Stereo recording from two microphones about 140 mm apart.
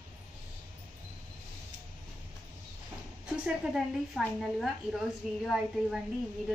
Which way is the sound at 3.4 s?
5° right (ahead or behind).